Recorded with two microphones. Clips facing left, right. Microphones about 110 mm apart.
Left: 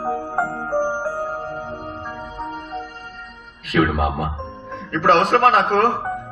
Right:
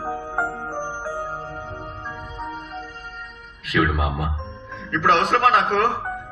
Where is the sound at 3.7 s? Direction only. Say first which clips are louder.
Left 3 dB; 45° left (ahead or behind).